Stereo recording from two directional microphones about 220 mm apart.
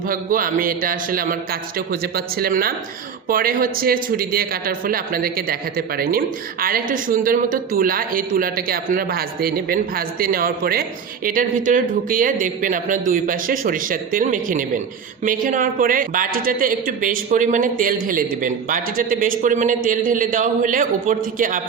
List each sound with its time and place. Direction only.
0.1 s a man's voice: 40° right (ahead or behind)